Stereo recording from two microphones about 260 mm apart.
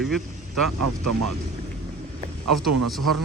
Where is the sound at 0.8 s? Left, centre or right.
Right.